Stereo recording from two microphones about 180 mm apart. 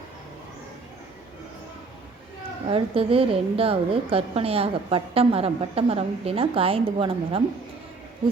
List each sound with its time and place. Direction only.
2.6 s a woman's voice: 30° right (ahead or behind)